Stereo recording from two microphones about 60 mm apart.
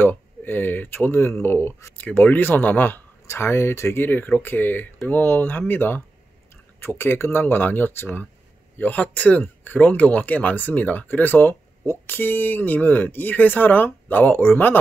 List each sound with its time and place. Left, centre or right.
0.0 s speech: left
2.0 s speech: left
3.3 s speech: left